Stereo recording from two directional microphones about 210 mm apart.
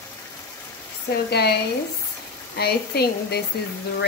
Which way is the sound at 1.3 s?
50° left (ahead or behind).